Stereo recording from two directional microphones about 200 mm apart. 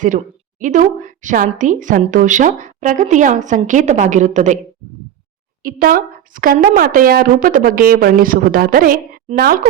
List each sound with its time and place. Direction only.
0.6 s a woman's voice: 40° right (ahead or behind)
5.6 s a woman's voice: 45° right (ahead or behind)